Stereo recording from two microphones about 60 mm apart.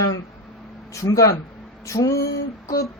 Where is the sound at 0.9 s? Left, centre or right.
Left.